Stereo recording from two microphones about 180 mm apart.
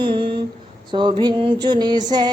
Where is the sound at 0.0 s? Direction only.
25° right (ahead or behind).